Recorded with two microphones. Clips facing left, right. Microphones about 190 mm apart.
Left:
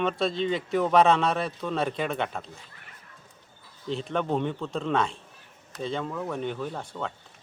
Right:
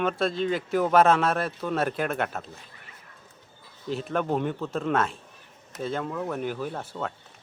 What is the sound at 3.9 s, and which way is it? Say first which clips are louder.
Speech: right 1 dB; 5° right (ahead or behind).